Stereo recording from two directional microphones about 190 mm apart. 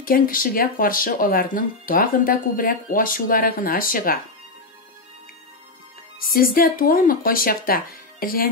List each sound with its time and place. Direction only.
0.0 s speech: 45° left (ahead or behind)
6.1 s speech: 50° left (ahead or behind)